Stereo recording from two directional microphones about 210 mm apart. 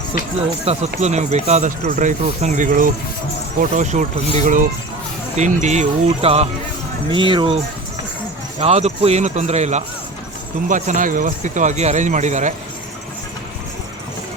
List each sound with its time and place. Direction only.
0.3 s speech: 30° right (ahead or behind)